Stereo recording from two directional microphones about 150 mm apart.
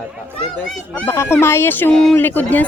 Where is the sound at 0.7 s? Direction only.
10° left (ahead or behind).